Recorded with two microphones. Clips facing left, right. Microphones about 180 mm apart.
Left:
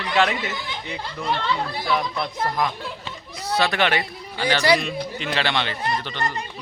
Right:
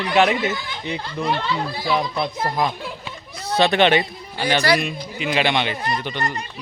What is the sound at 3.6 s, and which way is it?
Speech, 25° right (ahead or behind).